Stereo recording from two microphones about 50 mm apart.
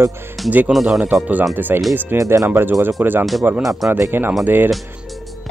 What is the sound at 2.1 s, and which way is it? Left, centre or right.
Speech, right.